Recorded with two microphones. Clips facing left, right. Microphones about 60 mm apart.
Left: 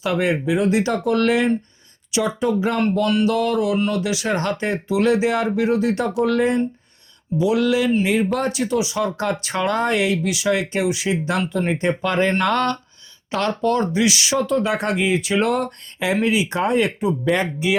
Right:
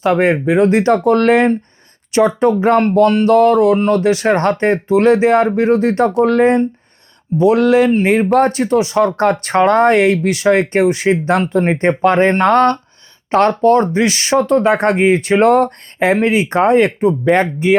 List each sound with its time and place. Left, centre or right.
0.0 s speech: right